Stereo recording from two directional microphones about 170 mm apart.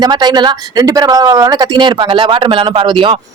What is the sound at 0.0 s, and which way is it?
Speech, 25° right (ahead or behind).